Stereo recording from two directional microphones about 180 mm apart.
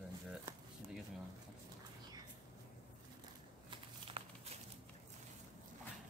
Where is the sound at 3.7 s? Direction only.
30° right (ahead or behind).